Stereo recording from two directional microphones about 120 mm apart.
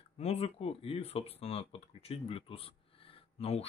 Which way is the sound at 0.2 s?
55° left (ahead or behind).